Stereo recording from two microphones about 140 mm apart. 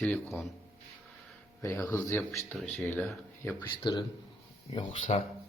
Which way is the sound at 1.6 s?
20° left (ahead or behind).